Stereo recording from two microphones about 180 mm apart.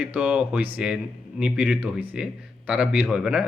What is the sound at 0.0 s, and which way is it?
Speech, 5° right (ahead or behind).